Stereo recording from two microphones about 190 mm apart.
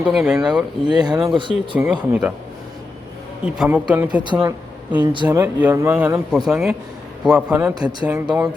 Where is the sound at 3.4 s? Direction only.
5° right (ahead or behind).